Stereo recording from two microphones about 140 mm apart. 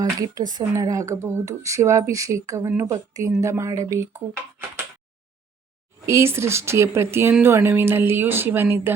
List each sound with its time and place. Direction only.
0.0 s speech: 30° right (ahead or behind)
6.1 s speech: 20° right (ahead or behind)